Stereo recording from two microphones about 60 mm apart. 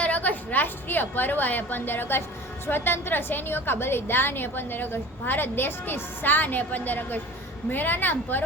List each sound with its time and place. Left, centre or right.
0.0 s a woman's voice: left